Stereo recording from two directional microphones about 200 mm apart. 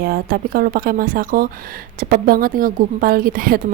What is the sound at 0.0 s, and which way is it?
Speech, 45° right (ahead or behind).